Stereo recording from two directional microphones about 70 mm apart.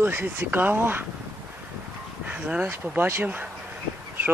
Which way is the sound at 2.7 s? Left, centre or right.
Right.